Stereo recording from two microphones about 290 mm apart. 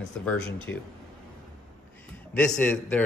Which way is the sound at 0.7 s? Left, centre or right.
Left.